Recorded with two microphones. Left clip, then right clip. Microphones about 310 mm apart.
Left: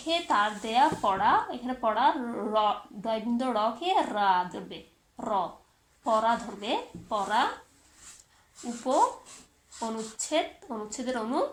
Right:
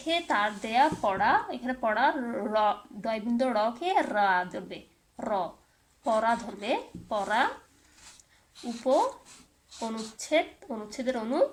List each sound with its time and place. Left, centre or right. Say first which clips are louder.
0.1 s speech: left 1 dB; right
8.9 s speech: even; right